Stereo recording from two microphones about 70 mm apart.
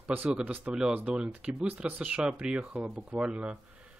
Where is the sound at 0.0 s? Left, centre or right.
Centre.